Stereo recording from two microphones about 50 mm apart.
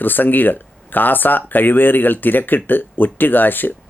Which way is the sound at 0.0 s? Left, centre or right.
Left.